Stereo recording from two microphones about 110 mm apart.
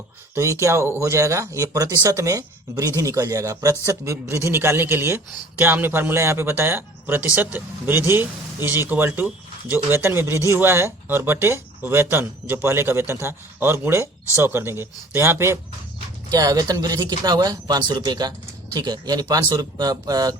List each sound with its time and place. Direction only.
0.6 s speech: 25° right (ahead or behind)
16.3 s speech: 35° right (ahead or behind)